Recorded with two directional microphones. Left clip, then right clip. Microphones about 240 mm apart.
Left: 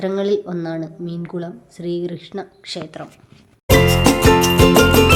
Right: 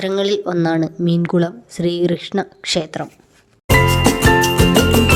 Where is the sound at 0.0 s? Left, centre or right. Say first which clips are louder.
Right 2 dB; right.